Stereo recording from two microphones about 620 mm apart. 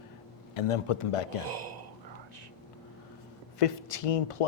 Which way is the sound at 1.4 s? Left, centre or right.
Right.